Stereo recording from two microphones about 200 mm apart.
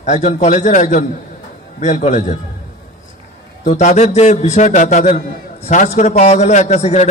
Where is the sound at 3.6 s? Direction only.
35° left (ahead or behind).